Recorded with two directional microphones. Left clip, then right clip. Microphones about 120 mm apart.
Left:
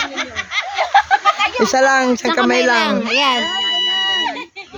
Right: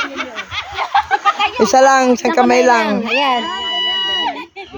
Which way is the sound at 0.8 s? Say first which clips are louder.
Left 1 dB; 50° left (ahead or behind).